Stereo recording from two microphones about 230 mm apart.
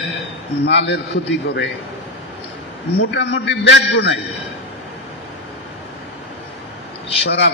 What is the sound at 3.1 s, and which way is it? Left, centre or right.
Speech, left.